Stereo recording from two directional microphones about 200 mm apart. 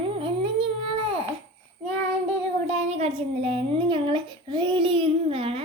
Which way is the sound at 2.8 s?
30° right (ahead or behind).